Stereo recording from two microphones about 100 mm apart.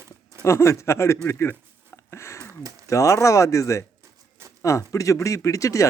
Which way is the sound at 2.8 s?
30° left (ahead or behind).